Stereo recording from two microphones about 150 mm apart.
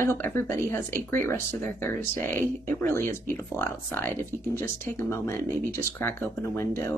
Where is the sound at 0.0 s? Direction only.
15° left (ahead or behind).